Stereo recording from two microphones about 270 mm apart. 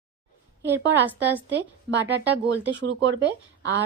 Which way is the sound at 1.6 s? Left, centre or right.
Right.